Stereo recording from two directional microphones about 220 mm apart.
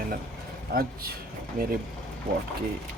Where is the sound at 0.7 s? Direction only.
45° right (ahead or behind).